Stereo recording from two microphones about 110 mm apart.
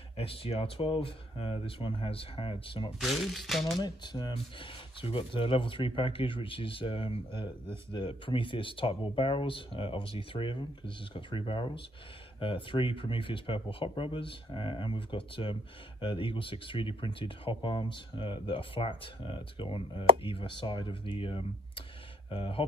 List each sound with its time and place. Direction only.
0.2 s speech: 60° left (ahead or behind)
3.0 s speech: centre (ahead or behind)
3.8 s speech: 40° left (ahead or behind)